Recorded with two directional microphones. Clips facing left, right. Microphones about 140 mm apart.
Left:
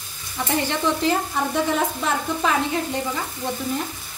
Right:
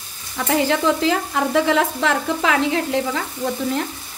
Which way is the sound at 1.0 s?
90° right.